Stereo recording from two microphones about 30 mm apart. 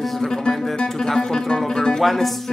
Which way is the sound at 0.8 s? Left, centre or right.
Centre.